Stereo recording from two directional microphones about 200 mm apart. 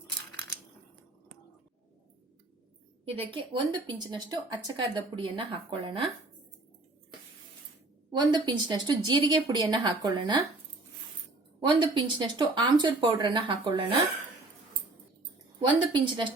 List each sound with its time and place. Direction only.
3.0 s a woman's voice: 25° right (ahead or behind)
8.1 s a woman's voice: 20° right (ahead or behind)
11.6 s a woman's voice: 25° right (ahead or behind)
15.7 s a woman's voice: 25° right (ahead or behind)